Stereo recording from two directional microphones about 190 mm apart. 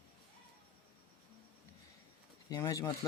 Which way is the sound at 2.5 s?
20° left (ahead or behind).